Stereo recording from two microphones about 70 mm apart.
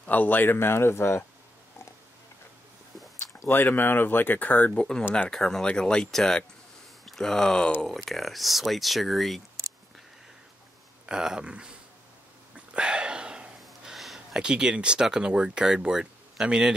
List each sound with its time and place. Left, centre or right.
0.0 s speech: left
3.3 s speech: left; by 9.4 s centre
11.1 s speech: centre
12.5 s a sound: centre
13.6 s speech: centre